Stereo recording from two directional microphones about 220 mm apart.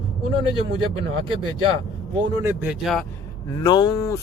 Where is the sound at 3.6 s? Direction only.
20° left (ahead or behind).